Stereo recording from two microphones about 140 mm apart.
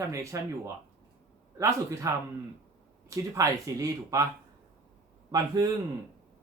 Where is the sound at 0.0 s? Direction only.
20° right (ahead or behind).